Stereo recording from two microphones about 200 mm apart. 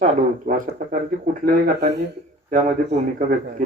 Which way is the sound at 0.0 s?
40° right (ahead or behind).